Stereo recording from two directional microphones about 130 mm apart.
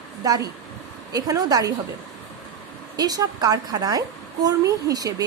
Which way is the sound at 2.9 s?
30° right (ahead or behind).